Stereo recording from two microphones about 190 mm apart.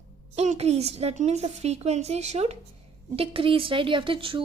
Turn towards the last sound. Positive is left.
turn(degrees=-30)  # may be behind; listen again after turning